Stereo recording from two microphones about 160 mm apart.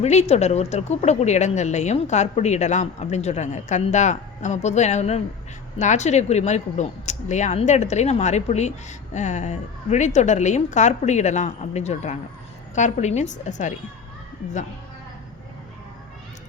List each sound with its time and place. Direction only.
0.0 s speech: 45° left (ahead or behind)